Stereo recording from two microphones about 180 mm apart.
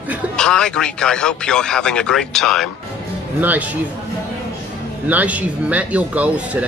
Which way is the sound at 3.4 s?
10° right (ahead or behind).